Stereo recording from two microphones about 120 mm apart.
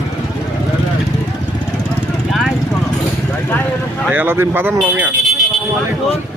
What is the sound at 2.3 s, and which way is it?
Vehicle, 5° right (ahead or behind).